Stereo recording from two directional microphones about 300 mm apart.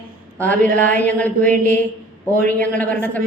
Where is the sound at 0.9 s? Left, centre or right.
Centre.